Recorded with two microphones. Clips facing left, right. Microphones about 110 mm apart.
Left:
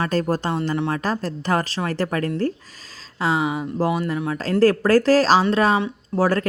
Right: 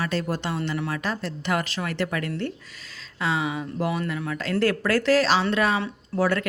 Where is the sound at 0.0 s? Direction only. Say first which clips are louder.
Left 5 dB; 40° left (ahead or behind).